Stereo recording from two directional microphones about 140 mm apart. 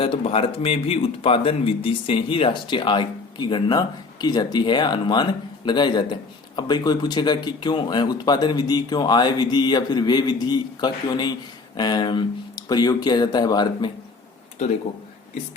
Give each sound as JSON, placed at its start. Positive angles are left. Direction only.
{"t": 0.0, "sound": "speech", "side_deg": 40}